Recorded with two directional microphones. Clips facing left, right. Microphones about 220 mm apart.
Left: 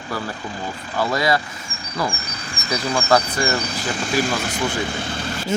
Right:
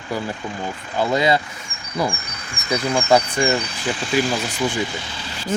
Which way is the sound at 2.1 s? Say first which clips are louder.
Left 3 dB; 35° left (ahead or behind).